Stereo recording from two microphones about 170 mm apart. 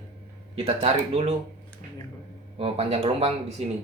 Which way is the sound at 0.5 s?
35° right (ahead or behind).